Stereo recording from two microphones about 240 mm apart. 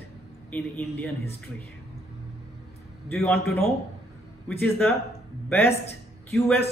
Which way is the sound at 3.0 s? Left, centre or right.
Centre.